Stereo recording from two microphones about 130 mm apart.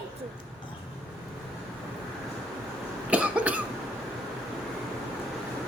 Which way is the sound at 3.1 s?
10° right (ahead or behind).